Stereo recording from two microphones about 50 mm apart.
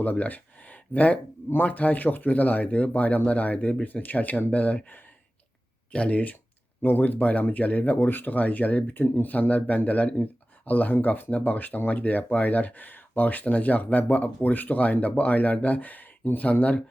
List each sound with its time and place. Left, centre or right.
0.0 s speech: left
6.8 s speech: left
7.9 s speech: left
9.0 s speech: left
9.3 s speech: left